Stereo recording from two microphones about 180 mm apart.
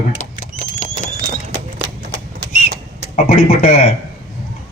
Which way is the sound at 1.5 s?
90° right.